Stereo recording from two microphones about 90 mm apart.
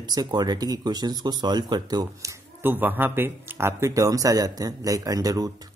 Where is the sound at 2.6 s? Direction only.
20° right (ahead or behind).